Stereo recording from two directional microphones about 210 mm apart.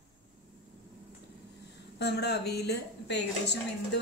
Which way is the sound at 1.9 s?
50° left (ahead or behind).